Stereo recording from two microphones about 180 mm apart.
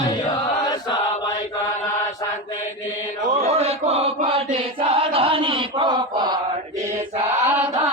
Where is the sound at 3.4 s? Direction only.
35° right (ahead or behind).